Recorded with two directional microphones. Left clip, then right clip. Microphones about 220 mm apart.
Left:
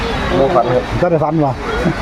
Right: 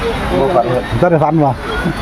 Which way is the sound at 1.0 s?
20° right (ahead or behind).